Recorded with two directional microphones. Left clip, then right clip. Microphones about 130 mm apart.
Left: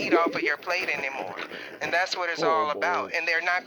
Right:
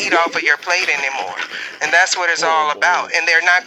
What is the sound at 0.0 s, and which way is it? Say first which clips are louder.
Speech: right 8 dB; 45° left (ahead or behind).